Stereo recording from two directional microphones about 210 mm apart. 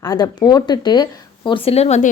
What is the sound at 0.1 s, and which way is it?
Speech, 20° left (ahead or behind).